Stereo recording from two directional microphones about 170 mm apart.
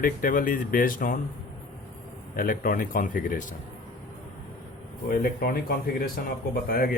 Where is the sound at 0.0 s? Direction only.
55° left (ahead or behind).